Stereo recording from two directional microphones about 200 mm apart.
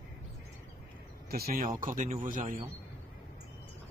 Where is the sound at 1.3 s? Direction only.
45° right (ahead or behind).